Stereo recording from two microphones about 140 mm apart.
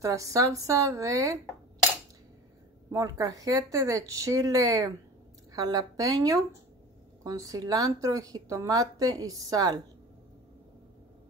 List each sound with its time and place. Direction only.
0.0 s speech: 25° right (ahead or behind)
2.9 s speech: 25° right (ahead or behind)